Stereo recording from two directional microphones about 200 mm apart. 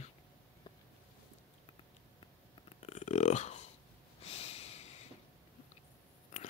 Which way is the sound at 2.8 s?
35° left (ahead or behind).